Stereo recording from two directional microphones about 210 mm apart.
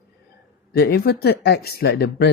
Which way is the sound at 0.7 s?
50° left (ahead or behind).